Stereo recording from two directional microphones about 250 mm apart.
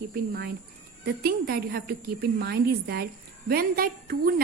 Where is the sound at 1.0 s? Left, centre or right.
Right.